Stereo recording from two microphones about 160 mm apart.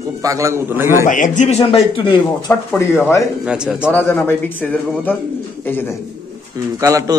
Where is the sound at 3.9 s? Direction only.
10° left (ahead or behind).